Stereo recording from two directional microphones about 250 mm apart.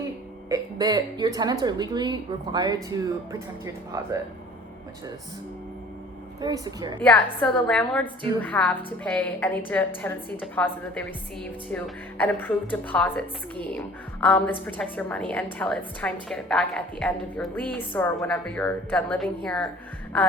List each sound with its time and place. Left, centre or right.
0.4 s a woman's voice: centre
6.4 s a woman's voice: centre
7.0 s a woman's voice: centre